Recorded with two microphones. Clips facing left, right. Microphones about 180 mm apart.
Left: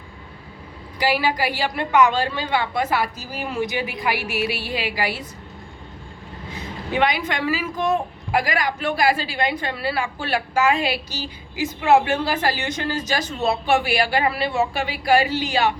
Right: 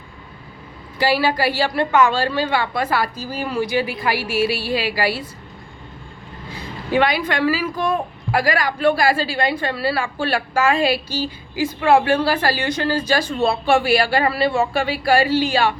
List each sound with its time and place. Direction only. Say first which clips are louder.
0.9 s a woman's voice: right 3 dB; 15° left (ahead or behind)
6.5 s a woman's voice: right 5 dB; 20° left (ahead or behind)